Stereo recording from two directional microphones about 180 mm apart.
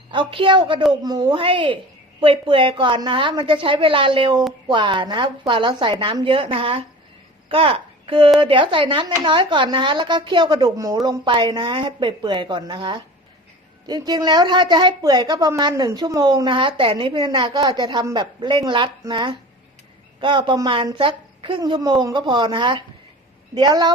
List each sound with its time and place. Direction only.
0.1 s a woman's voice: 30° right (ahead or behind)